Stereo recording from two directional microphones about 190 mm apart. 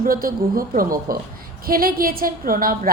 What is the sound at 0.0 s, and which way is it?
A woman's voice, 50° right (ahead or behind).